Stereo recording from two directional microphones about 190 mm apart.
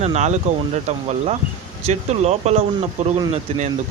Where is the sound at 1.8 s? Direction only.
35° right (ahead or behind).